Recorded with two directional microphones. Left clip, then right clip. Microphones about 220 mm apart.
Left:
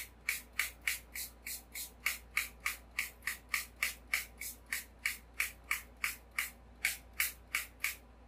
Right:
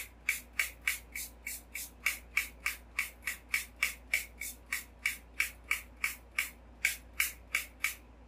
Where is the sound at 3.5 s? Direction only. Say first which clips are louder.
Right 4 dB; centre (ahead or behind).